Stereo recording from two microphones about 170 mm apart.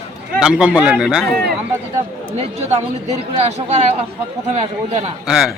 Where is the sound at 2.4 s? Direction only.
40° right (ahead or behind).